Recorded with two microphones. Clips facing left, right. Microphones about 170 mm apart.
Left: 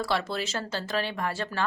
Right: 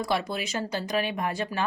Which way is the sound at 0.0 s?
15° right (ahead or behind).